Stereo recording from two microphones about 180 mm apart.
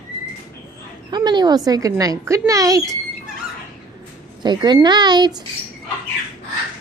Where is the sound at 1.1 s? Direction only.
25° right (ahead or behind).